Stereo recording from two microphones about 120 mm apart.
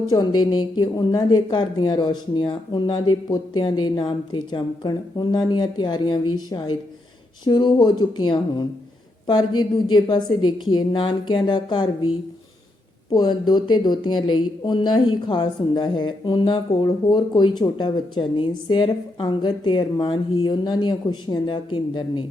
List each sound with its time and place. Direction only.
0.1 s speech: 35° left (ahead or behind)
13.1 s speech: 35° left (ahead or behind)